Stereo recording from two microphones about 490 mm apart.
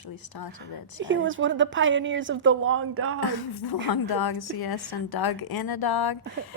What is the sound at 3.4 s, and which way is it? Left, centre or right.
A woman's voice, left.